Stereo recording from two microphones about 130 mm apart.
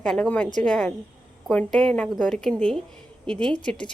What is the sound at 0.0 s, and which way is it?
A woman's voice, 5° left (ahead or behind).